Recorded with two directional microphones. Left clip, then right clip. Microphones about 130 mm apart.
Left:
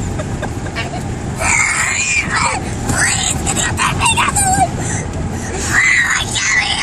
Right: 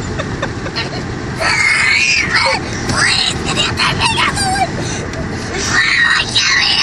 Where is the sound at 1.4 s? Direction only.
20° left (ahead or behind).